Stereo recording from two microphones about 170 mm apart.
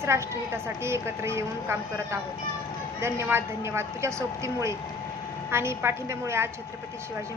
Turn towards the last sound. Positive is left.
turn(degrees=-15)  # may be behind; listen again after turning